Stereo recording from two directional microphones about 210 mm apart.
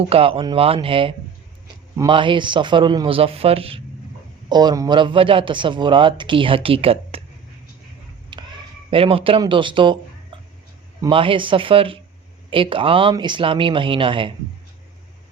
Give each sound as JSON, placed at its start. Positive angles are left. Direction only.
{"t": 0.1, "sound": "a man's voice", "side_deg": -25}
{"t": 8.3, "sound": "a sound", "side_deg": -20}
{"t": 8.9, "sound": "a man's voice", "side_deg": -25}
{"t": 11.0, "sound": "a man's voice", "side_deg": -25}